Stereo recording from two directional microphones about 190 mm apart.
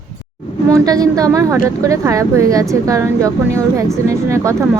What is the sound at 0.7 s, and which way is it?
Speech, 20° right (ahead or behind).